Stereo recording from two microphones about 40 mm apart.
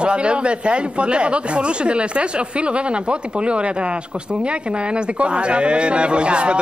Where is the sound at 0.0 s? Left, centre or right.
Right.